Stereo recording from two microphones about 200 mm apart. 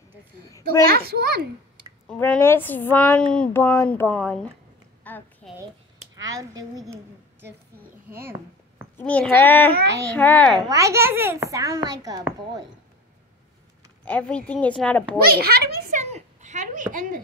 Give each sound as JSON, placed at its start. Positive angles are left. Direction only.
{"t": 0.7, "sound": "a child's voice", "side_deg": -50}
{"t": 2.0, "sound": "a woman's voice", "side_deg": 10}
{"t": 5.0, "sound": "a sound", "side_deg": 10}
{"t": 6.1, "sound": "a child's voice", "side_deg": -20}
{"t": 7.4, "sound": "a sound", "side_deg": -45}
{"t": 8.2, "sound": "a child's voice", "side_deg": -10}
{"t": 8.9, "sound": "a woman's voice", "side_deg": 5}
{"t": 10.7, "sound": "a child's voice", "side_deg": -15}
{"t": 14.0, "sound": "a woman's voice", "side_deg": 5}
{"t": 15.1, "sound": "a child's voice", "side_deg": -50}
{"t": 16.0, "sound": "speech", "side_deg": -35}